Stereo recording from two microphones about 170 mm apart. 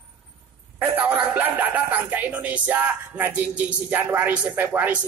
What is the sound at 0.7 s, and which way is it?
Speech, 10° right (ahead or behind).